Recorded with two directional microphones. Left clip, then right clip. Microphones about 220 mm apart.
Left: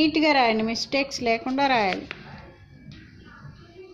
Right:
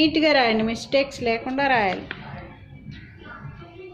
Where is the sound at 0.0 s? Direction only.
20° left (ahead or behind).